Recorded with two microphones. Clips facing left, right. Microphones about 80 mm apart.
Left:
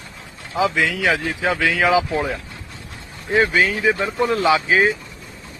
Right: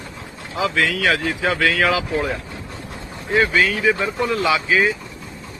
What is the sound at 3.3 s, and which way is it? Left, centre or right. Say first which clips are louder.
Speech: even; left.